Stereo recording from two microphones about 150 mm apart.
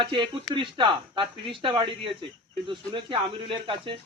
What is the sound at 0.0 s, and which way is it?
Speech, 35° right (ahead or behind).